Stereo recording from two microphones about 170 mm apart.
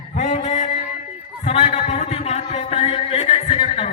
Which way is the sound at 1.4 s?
40° left (ahead or behind).